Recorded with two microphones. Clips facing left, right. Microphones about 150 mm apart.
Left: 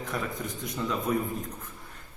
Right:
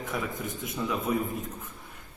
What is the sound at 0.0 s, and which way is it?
A man's voice, centre (ahead or behind).